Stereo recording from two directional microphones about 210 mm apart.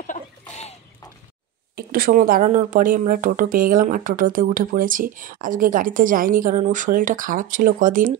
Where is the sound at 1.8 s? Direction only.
45° right (ahead or behind).